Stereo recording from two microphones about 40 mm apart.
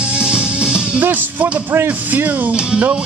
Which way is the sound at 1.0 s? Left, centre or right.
Right.